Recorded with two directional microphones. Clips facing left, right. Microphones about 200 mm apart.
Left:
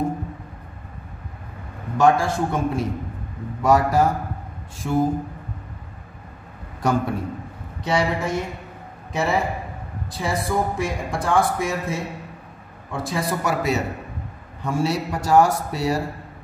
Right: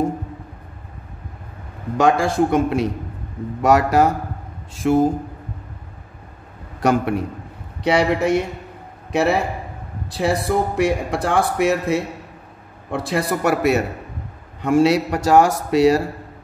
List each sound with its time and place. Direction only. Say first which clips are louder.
2.0 s a man's voice: right 2 dB; 85° right
6.8 s speech: right 4 dB; 75° right (ahead or behind)
14.6 s speech: right 8 dB; 75° right (ahead or behind)